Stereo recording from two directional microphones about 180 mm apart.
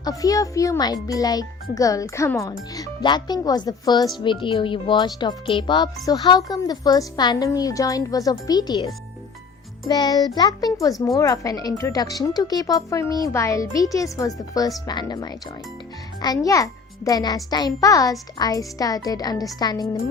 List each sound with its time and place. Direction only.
0.0 s speech: 20° left (ahead or behind)
9.8 s speech: 20° left (ahead or behind)